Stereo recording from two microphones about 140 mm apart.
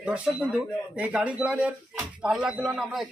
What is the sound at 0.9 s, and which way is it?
Speech, 10° right (ahead or behind).